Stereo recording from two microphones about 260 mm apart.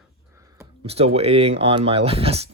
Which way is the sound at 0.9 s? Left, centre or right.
Right.